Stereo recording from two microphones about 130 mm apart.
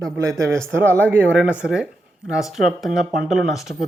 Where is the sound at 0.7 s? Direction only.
20° right (ahead or behind).